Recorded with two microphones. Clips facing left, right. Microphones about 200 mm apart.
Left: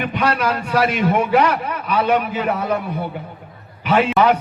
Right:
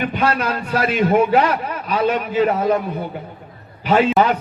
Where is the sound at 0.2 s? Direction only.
35° right (ahead or behind).